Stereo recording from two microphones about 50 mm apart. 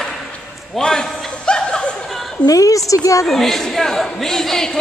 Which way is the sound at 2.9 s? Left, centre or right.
Left.